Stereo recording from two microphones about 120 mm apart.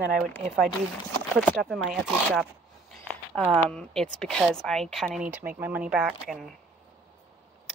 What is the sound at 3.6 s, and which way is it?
Speech, 5° left (ahead or behind).